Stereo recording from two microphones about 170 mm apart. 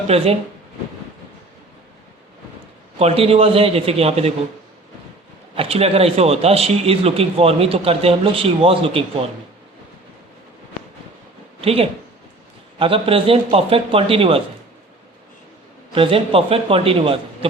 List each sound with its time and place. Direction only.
0.1 s speech: 35° right (ahead or behind)
3.0 s speech: 35° right (ahead or behind)
5.5 s speech: 35° right (ahead or behind)
11.6 s a woman's voice: 35° right (ahead or behind)
16.0 s speech: 35° right (ahead or behind)